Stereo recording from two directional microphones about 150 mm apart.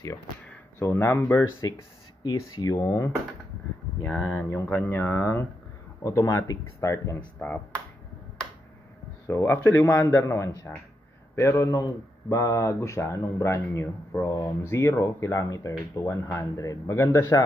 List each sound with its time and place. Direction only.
0.7 s speech: 15° left (ahead or behind)
1.6 s speech: 25° left (ahead or behind); by 7.6 s 10° left (ahead or behind)
9.3 s speech: 15° left (ahead or behind)
11.5 s speech: 25° left (ahead or behind)